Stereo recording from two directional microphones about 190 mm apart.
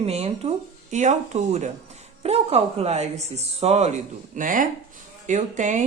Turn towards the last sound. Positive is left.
turn(degrees=-40)  # may be behind; listen again after turning